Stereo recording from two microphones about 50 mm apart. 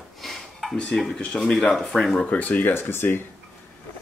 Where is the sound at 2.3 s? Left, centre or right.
Left.